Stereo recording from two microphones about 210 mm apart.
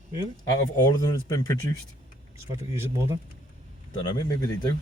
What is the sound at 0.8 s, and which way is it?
Speech, 20° left (ahead or behind).